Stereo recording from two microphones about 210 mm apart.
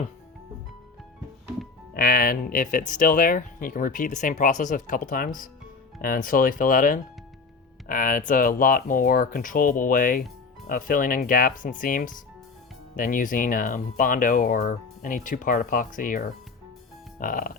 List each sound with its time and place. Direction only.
1.9 s speech: 45° left (ahead or behind)